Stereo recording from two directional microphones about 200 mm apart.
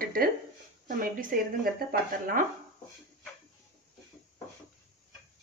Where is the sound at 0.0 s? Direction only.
45° right (ahead or behind).